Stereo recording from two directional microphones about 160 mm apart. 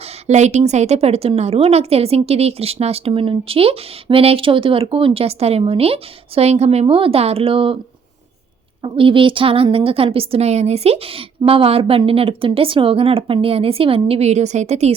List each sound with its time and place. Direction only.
0.3 s a woman's voice: 45° right (ahead or behind)
8.8 s a woman's voice: 35° right (ahead or behind)